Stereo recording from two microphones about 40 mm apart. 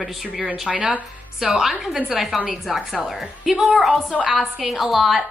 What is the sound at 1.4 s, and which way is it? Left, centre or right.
A woman's voice, centre.